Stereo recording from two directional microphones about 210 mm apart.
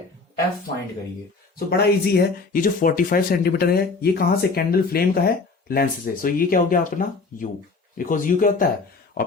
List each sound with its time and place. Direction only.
1.5 s speech: 45° left (ahead or behind)